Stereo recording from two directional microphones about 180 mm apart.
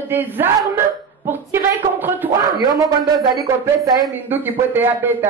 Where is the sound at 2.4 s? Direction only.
25° right (ahead or behind).